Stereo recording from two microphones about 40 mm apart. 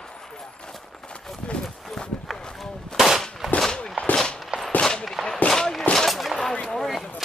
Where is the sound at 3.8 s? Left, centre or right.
Left.